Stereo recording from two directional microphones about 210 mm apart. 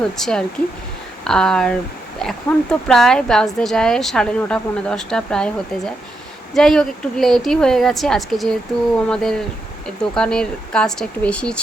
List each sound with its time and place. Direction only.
0.0 s speech: 5° left (ahead or behind)